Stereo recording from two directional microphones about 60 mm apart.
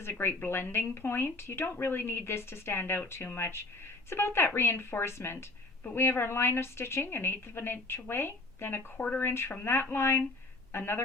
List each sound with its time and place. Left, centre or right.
0.0 s speech: left
9.0 s speech: left
9.2 s speech: left